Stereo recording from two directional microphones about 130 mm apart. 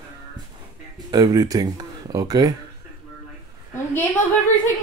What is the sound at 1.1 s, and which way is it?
Speech, 30° right (ahead or behind).